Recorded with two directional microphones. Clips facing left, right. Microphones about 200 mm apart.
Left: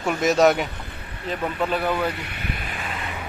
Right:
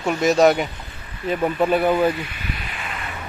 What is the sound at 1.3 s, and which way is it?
Speech, 15° right (ahead or behind).